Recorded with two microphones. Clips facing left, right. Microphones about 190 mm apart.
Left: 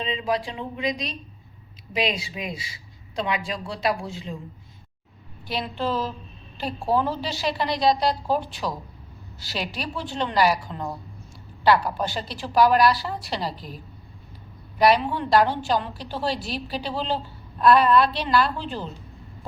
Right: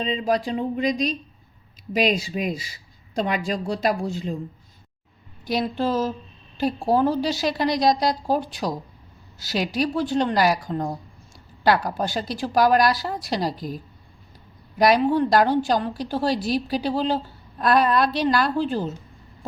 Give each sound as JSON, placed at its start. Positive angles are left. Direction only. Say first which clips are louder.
{"t": 0.0, "sound": "a woman's voice", "louder": "right 3 dB", "side_deg": -45}
{"t": 5.5, "sound": "a woman's voice", "louder": "right 4 dB", "side_deg": -40}
{"t": 14.8, "sound": "a woman's voice", "louder": "right 2 dB", "side_deg": -45}